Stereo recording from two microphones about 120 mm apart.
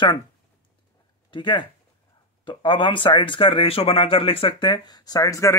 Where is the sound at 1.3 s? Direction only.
40° left (ahead or behind).